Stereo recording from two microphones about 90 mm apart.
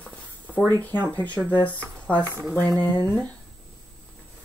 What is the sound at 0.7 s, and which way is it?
Speech, 20° left (ahead or behind).